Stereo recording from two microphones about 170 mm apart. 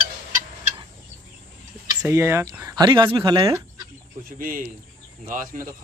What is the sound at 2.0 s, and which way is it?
Speech, 15° right (ahead or behind).